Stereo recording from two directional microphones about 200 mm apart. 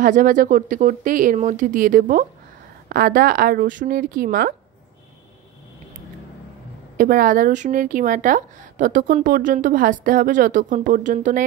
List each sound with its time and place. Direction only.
0.0 s a woman's voice: 40° right (ahead or behind)
7.0 s a woman's voice: 45° right (ahead or behind)